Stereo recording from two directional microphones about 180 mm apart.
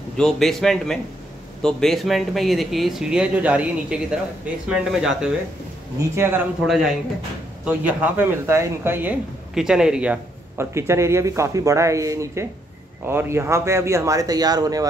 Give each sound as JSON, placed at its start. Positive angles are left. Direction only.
{"t": 0.2, "sound": "speech", "side_deg": 0}
{"t": 6.6, "sound": "speech", "side_deg": -5}